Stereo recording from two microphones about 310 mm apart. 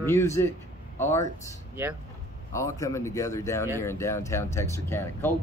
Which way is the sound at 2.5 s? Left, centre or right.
Centre.